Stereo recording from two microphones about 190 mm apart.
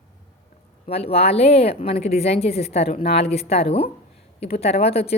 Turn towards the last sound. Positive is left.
turn(degrees=35)  # may be behind; listen again after turning